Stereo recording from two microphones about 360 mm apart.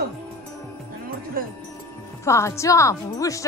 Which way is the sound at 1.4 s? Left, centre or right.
Right.